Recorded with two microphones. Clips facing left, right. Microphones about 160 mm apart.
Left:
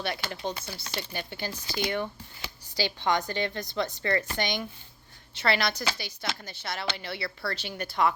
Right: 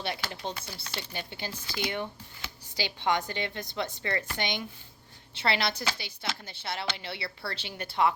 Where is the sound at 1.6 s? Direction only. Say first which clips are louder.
Left 3 dB; 30° left (ahead or behind).